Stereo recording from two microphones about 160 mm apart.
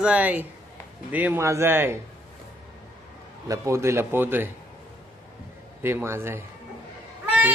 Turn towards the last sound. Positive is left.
turn(degrees=-10)  # may be behind; listen again after turning